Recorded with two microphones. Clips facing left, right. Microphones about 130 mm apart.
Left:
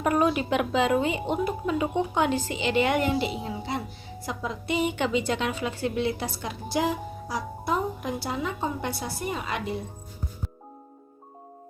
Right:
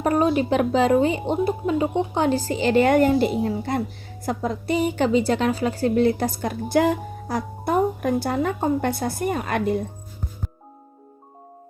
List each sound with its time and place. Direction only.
0.0 s a woman's voice: 35° right (ahead or behind); by 9.8 s 50° right (ahead or behind)